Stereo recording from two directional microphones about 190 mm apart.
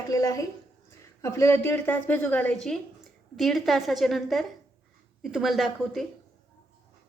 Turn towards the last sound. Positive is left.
turn(degrees=0)  # may be behind; listen again after turning